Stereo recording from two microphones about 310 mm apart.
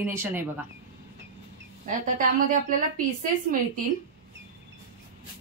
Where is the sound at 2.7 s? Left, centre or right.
Right.